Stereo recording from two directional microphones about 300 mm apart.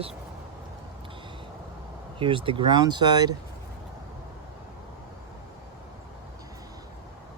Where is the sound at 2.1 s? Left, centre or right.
Centre.